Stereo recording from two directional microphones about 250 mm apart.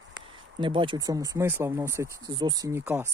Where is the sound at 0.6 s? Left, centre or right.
Centre.